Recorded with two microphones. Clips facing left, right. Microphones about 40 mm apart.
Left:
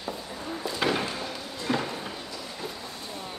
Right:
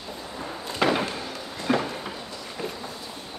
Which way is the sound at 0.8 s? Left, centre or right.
Right.